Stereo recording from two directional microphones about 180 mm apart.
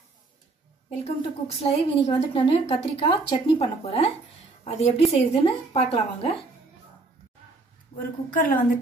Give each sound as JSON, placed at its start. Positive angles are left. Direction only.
{"t": 0.8, "sound": "a woman's voice", "side_deg": 35}
{"t": 8.0, "sound": "a woman's voice", "side_deg": 50}